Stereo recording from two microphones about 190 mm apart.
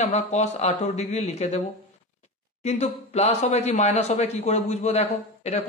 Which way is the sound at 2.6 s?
35° left (ahead or behind).